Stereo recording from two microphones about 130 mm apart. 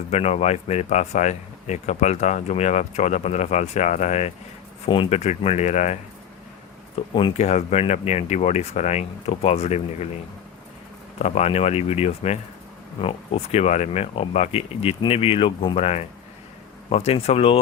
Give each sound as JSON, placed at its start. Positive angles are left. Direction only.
{"t": 0.1, "sound": "speech", "side_deg": 55}
{"t": 4.9, "sound": "speech", "side_deg": 45}
{"t": 7.1, "sound": "speech", "side_deg": 40}
{"t": 7.3, "sound": "speech", "side_deg": 55}
{"t": 11.2, "sound": "speech", "side_deg": 55}